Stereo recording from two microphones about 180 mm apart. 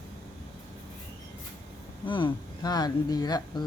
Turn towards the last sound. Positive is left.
turn(degrees=20)  # may be behind; listen again after turning